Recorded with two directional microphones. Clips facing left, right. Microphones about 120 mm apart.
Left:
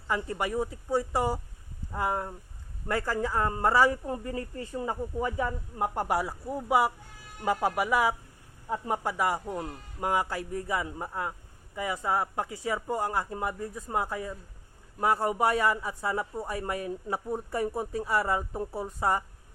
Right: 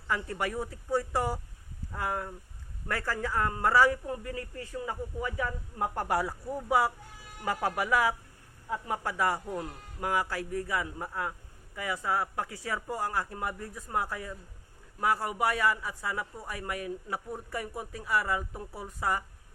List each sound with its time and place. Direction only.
0.1 s speech: 20° left (ahead or behind)